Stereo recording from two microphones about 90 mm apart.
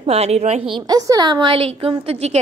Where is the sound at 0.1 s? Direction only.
90° right.